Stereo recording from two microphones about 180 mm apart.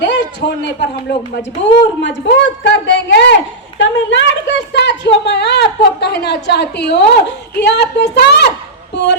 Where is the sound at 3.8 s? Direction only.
85° left.